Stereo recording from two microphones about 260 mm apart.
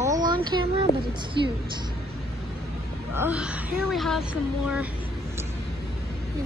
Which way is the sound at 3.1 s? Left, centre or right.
Centre.